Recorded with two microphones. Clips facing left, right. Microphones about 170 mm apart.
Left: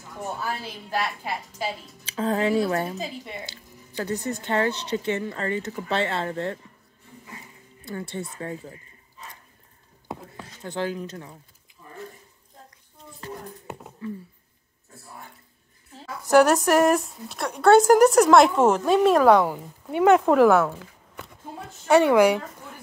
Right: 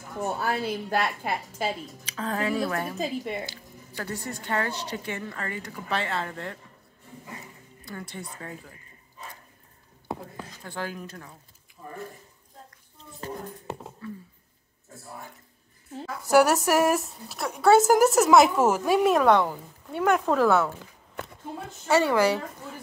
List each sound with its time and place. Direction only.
0.4 s a woman's voice: 55° right (ahead or behind)
2.0 s a woman's voice: 30° left (ahead or behind)
3.9 s a woman's voice: 20° left (ahead or behind)
7.8 s a woman's voice: 25° left (ahead or behind)
10.6 s a woman's voice: 25° left (ahead or behind)
16.3 s a woman's voice: 10° right (ahead or behind); by 20.7 s 10° left (ahead or behind)
21.8 s speech: 15° left (ahead or behind)